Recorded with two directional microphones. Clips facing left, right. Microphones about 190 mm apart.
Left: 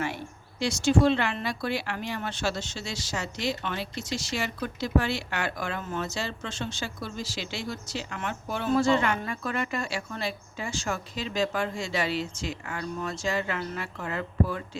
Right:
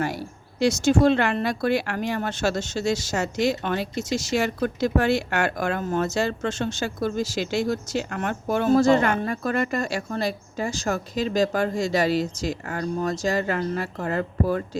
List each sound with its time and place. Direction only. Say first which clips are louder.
0.0 s speech: right 5 dB; 40° right (ahead or behind)